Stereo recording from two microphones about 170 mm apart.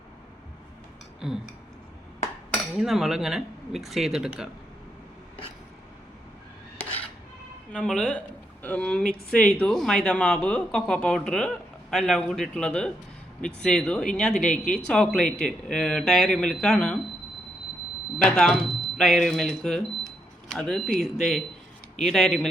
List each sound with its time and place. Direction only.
1.2 s speech: 5° right (ahead or behind)
2.7 s speech: centre (ahead or behind)
7.7 s speech: 5° left (ahead or behind)
18.2 s speech: 5° left (ahead or behind)